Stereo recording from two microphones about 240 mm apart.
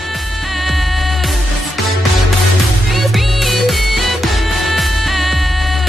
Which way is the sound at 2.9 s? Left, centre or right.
Centre.